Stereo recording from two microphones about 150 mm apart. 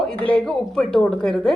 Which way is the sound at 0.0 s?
5° left (ahead or behind).